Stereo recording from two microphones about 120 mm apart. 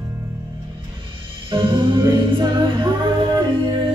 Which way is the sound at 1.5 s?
45° right (ahead or behind).